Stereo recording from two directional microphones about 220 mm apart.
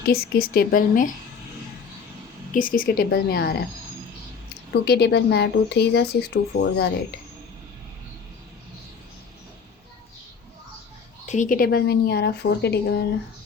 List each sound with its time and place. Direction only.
0.0 s speech: 45° left (ahead or behind)
2.5 s speech: 40° left (ahead or behind)
4.7 s speech: 50° left (ahead or behind)
11.3 s speech: 35° left (ahead or behind)